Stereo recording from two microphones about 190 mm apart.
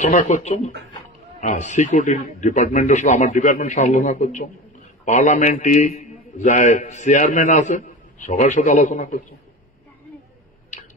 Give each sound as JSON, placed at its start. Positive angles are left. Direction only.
{"t": 0.0, "sound": "a man's voice", "side_deg": 40}